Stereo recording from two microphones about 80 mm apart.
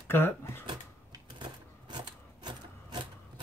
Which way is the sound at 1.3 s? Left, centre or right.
Right.